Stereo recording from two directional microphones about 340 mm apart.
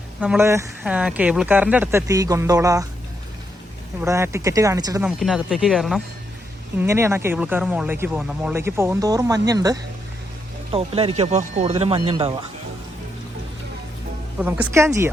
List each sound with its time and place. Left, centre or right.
0.2 s speech: centre
4.0 s speech: centre
14.3 s speech: centre